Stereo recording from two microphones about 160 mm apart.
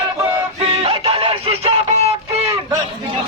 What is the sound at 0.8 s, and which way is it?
Music, 35° right (ahead or behind).